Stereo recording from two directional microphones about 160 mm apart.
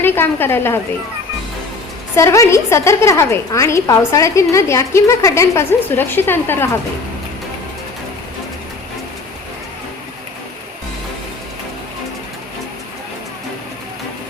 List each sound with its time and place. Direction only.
0.0 s a woman's voice: 15° left (ahead or behind)
2.1 s a woman's voice: 20° left (ahead or behind)